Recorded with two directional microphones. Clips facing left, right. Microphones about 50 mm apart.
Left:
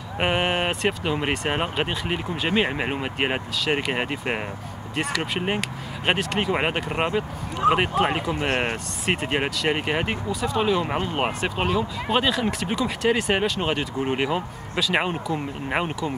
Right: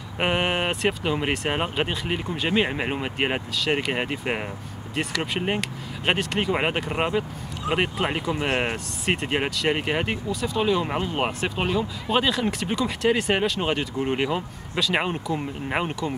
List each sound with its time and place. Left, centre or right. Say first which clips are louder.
0.2 s speech: left 1 dB; centre
7.6 s speech: left 7 dB; left
8.0 s speech: left 2 dB; centre